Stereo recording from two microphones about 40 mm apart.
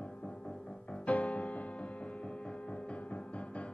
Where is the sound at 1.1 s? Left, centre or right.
Left.